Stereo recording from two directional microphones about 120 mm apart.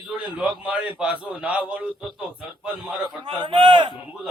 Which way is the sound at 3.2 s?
45° right (ahead or behind).